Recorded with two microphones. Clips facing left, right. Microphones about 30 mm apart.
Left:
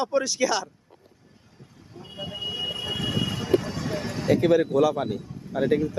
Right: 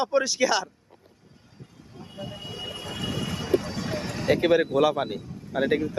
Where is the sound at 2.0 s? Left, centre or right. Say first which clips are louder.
Left 5 dB; centre.